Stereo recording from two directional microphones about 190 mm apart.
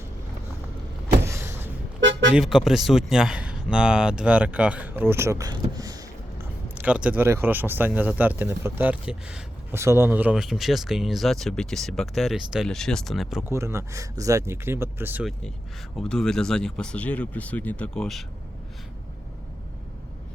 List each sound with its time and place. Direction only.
1.2 s vehicle: 15° right (ahead or behind)
2.0 s toot: 70° right (ahead or behind)
2.3 s speech: 5° right (ahead or behind)
5.7 s vehicle: 20° right (ahead or behind)
6.7 s speech: 5° right (ahead or behind)
13.5 s speech: 15° right (ahead or behind)
16.0 s speech: 5° left (ahead or behind)